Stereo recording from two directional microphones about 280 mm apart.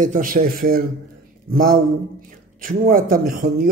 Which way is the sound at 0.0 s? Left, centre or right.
Right.